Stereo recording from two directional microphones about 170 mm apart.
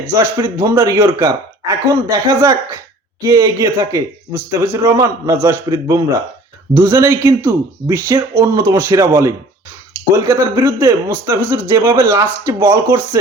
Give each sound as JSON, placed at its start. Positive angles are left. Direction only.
{"t": 0.1, "sound": "speech", "side_deg": -15}